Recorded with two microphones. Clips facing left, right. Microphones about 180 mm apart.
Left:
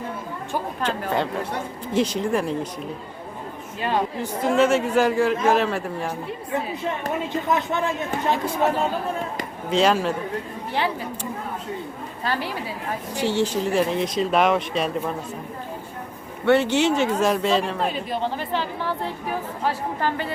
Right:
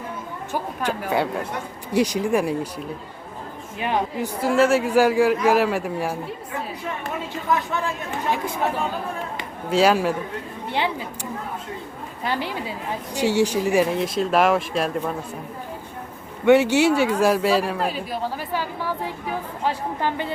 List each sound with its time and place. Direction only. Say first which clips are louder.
0.5 s speech: even; 10° right (ahead or behind)
3.8 s speech: even; 15° right (ahead or behind)
7.4 s speech: right 1 dB; 20° left (ahead or behind)
9.6 s a woman's voice: right 2 dB; 5° right (ahead or behind)
16.5 s speech: right 3 dB; 10° right (ahead or behind)